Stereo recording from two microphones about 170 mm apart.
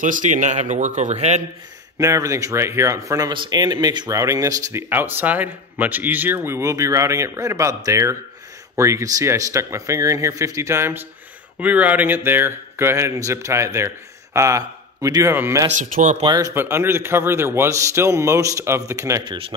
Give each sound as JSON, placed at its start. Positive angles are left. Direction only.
{"t": 0.0, "sound": "speech", "side_deg": -50}
{"t": 2.0, "sound": "speech", "side_deg": -20}
{"t": 15.7, "sound": "speech", "side_deg": -50}
{"t": 16.2, "sound": "speech", "side_deg": -25}
{"t": 16.5, "sound": "speech", "side_deg": -15}